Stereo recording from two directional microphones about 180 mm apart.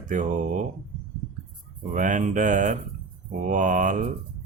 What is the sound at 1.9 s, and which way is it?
Speech, 45° right (ahead or behind).